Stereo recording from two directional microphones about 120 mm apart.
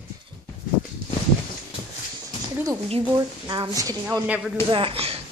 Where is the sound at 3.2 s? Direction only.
40° right (ahead or behind).